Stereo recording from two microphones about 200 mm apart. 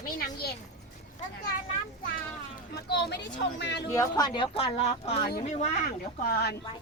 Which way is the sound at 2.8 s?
55° left (ahead or behind).